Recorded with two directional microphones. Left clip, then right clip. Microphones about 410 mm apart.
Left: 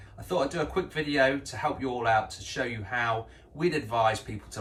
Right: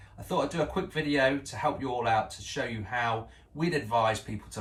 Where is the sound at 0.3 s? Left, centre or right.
Centre.